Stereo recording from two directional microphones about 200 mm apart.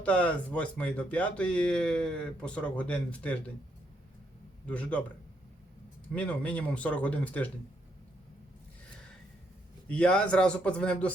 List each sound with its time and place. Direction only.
0.0 s speech: 5° left (ahead or behind)
4.6 s speech: 5° left (ahead or behind)
6.1 s speech: 5° left (ahead or behind)
9.9 s a man's voice: 5° left (ahead or behind)